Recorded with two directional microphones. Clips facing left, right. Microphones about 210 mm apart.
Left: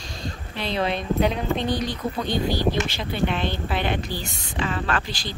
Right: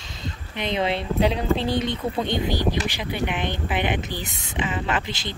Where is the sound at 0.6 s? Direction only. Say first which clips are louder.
Right 1 dB; 20° right (ahead or behind).